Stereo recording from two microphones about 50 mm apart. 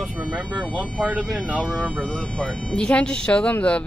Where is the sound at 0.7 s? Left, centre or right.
Right.